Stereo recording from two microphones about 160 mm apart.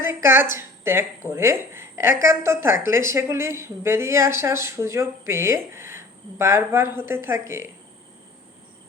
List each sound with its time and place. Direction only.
0.0 s a woman's voice: 15° right (ahead or behind)